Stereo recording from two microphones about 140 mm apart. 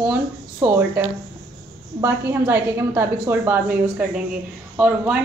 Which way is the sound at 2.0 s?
15° right (ahead or behind).